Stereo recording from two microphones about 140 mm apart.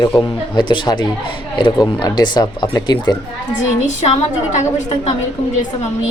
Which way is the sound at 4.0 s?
55° left (ahead or behind).